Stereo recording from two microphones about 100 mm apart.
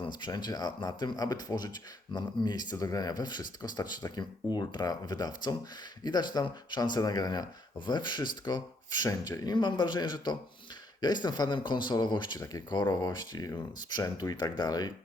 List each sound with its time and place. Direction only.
0.0 s speech: 45° left (ahead or behind)
12.4 s speech: 35° left (ahead or behind)